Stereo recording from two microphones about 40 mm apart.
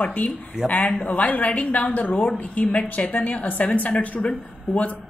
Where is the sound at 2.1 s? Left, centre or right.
Left.